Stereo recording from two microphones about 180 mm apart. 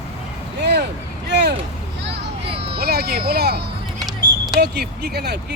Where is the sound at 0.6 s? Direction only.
70° right (ahead or behind).